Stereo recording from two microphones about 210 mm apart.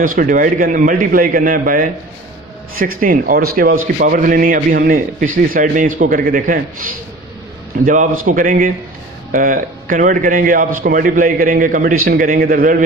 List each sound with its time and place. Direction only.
0.0 s a man's voice: 40° right (ahead or behind)